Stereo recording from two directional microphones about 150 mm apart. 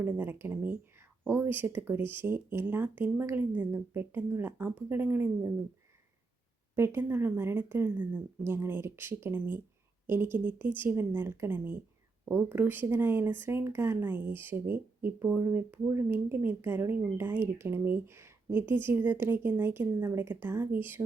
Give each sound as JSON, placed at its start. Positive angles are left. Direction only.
{"t": 0.0, "sound": "speech", "side_deg": -15}
{"t": 6.7, "sound": "speech", "side_deg": -15}